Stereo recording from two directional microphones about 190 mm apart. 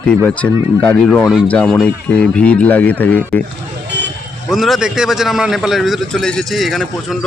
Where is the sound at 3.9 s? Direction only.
65° right (ahead or behind).